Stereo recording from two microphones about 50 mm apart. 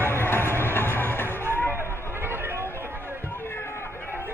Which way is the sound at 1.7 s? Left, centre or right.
Right.